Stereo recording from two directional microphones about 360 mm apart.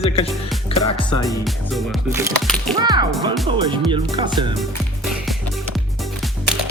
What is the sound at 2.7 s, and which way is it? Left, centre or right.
Music, centre.